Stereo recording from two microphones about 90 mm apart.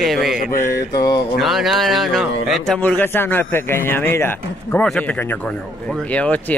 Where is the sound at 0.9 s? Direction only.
45° left (ahead or behind).